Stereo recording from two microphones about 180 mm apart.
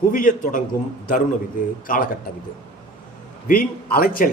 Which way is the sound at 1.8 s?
50° left (ahead or behind).